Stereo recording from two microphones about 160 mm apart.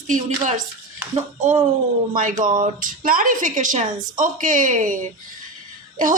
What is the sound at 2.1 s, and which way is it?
A woman's voice, 55° right (ahead or behind).